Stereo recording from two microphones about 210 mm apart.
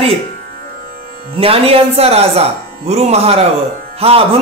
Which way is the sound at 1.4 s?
25° right (ahead or behind).